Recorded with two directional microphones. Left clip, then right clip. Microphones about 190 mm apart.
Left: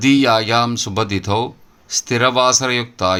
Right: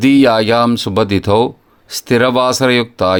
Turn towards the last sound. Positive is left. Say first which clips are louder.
# right 5 dB
turn(degrees=-45)  # may be behind; listen again after turning